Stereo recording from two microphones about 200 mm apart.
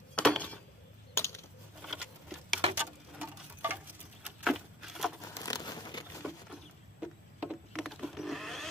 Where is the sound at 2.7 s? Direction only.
10° right (ahead or behind).